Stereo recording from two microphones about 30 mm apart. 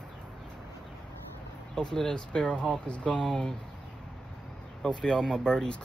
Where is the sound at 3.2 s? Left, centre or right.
Left.